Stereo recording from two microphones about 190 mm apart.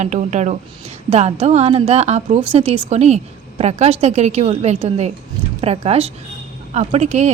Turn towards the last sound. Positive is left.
turn(degrees=-35)  # may be behind; listen again after turning